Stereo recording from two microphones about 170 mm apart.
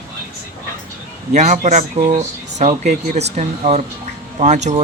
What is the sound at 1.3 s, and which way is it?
Speech, 45° right (ahead or behind).